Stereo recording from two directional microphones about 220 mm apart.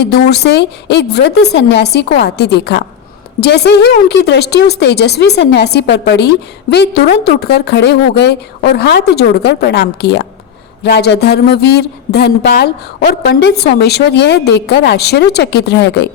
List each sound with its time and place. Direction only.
0.0 s a woman's voice: 50° left (ahead or behind)